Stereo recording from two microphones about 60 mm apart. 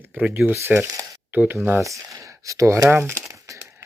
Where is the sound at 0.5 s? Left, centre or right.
Right.